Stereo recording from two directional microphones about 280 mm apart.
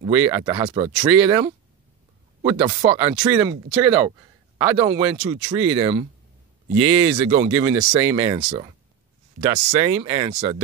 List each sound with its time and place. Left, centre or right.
0.0 s speech: centre